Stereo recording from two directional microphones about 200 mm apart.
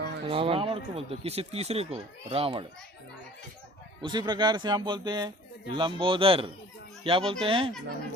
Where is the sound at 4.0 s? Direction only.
20° right (ahead or behind).